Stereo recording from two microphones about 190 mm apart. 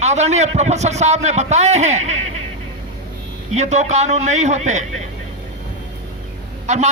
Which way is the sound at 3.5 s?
35° right (ahead or behind).